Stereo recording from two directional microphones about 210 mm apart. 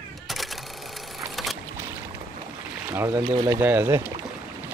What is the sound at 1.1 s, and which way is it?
Vehicle, centre (ahead or behind).